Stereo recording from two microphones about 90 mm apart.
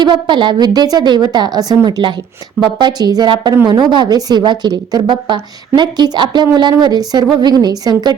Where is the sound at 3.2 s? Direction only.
60° right (ahead or behind).